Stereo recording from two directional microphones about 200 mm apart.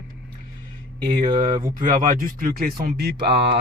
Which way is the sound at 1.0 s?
20° right (ahead or behind).